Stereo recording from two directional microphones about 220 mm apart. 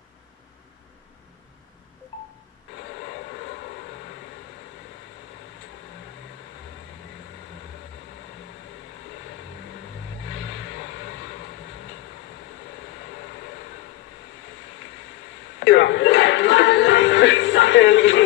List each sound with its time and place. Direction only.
15.6 s speech: 55° left (ahead or behind)